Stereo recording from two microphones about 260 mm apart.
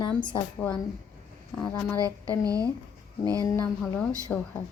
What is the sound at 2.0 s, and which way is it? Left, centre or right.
Speech, centre.